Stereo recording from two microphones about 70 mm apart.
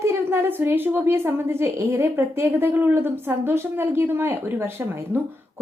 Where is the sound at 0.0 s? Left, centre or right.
Right.